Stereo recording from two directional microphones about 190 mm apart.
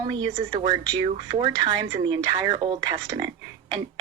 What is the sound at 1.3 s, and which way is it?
Speech, 25° right (ahead or behind).